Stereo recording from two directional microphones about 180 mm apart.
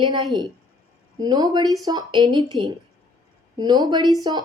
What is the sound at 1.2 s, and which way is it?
A woman's voice, 20° right (ahead or behind).